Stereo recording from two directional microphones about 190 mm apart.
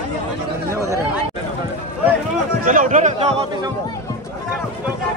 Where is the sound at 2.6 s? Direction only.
40° right (ahead or behind).